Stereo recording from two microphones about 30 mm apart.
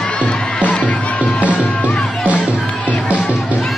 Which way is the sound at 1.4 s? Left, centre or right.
Left.